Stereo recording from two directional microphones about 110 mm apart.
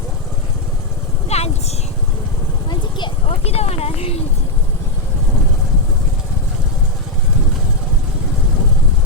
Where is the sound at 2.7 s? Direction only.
45° left (ahead or behind).